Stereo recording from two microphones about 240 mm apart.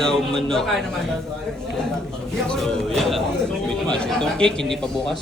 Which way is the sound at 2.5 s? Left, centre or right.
Centre.